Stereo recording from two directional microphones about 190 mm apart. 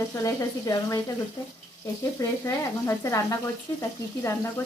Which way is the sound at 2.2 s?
15° left (ahead or behind).